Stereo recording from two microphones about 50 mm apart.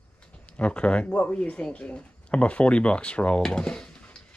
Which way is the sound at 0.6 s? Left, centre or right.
Left.